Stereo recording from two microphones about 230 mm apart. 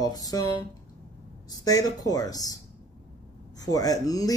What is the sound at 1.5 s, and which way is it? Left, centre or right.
Speech, centre.